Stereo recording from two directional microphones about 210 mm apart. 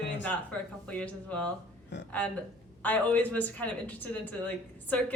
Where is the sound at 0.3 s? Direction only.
5° left (ahead or behind).